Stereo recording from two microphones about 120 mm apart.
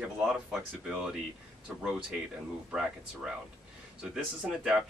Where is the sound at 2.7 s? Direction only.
5° right (ahead or behind).